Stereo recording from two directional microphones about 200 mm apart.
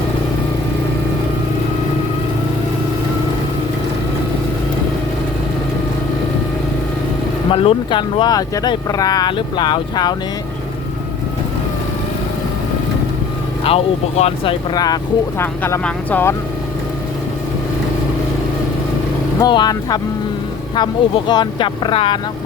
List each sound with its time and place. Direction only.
7.5 s speech: 25° left (ahead or behind)
13.7 s speech: 30° left (ahead or behind); by 16.3 s 10° left (ahead or behind)
19.4 s speech: 20° left (ahead or behind)